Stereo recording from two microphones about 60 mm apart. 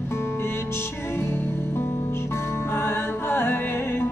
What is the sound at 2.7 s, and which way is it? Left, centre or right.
Music, left.